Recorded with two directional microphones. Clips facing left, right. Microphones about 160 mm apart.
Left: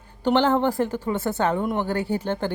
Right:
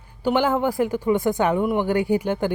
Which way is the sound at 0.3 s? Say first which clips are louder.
Left 1 dB; 10° right (ahead or behind).